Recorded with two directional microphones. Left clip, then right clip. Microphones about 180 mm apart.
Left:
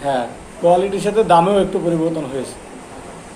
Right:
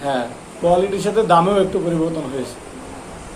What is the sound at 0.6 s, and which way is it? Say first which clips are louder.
A man's voice: left 2 dB; 10° left (ahead or behind).